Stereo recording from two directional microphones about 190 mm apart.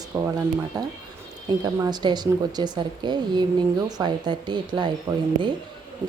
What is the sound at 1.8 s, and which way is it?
Speech, 20° right (ahead or behind).